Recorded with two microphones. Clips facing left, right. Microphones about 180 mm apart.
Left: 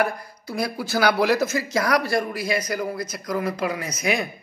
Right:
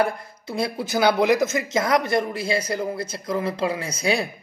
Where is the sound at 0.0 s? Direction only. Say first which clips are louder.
Right 1 dB; 25° right (ahead or behind).